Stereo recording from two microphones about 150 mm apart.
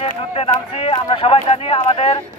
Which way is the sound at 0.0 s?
40° left (ahead or behind).